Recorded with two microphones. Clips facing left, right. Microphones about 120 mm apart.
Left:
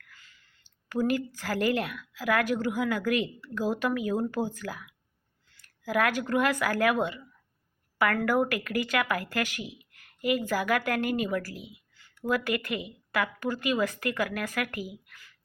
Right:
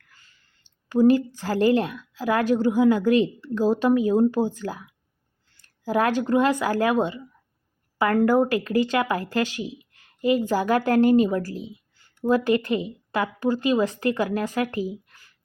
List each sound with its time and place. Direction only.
0.9 s a woman's voice: 25° right (ahead or behind)